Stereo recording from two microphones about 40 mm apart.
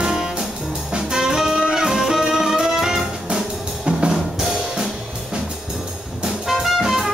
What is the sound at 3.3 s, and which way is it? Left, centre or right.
Drum, right.